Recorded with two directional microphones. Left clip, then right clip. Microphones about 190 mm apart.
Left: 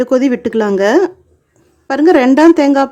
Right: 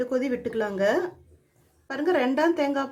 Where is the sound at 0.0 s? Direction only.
55° left (ahead or behind).